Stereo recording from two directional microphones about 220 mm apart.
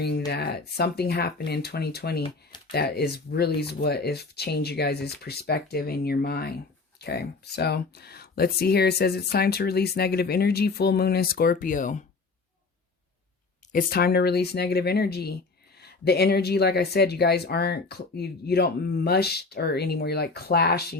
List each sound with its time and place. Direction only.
0.3 s speech: 45° left (ahead or behind)
13.7 s speech: 45° left (ahead or behind)